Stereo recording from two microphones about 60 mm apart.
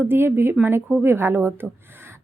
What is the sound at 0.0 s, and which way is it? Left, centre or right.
A woman's voice, right.